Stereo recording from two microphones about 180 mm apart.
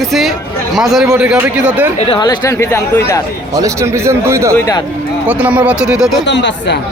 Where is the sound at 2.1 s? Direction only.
20° left (ahead or behind).